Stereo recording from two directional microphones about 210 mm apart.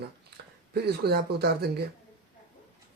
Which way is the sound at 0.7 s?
50° right (ahead or behind).